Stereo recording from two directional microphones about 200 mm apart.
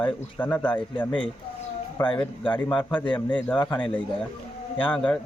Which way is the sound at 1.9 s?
25° left (ahead or behind).